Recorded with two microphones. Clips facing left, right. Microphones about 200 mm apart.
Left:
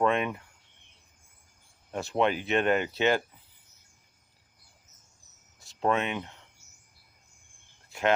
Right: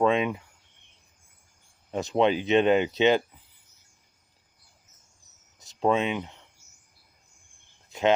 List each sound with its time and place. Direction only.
0.0 s speech: 15° right (ahead or behind)
1.9 s speech: 20° right (ahead or behind)
5.5 s speech: 20° right (ahead or behind)
7.9 s a sound: 20° right (ahead or behind)